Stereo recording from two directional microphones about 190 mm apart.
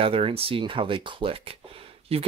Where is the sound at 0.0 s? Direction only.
30° right (ahead or behind).